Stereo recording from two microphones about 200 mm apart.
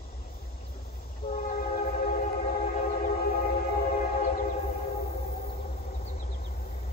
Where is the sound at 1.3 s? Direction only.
45° left (ahead or behind).